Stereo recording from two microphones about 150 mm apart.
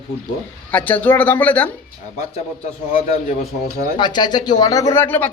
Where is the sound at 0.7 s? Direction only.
10° left (ahead or behind).